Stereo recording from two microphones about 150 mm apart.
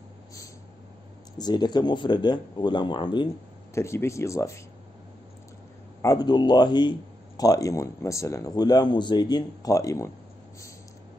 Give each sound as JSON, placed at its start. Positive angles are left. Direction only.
{"t": 1.4, "sound": "speech", "side_deg": 30}
{"t": 3.7, "sound": "speech", "side_deg": 20}
{"t": 6.0, "sound": "speech", "side_deg": 30}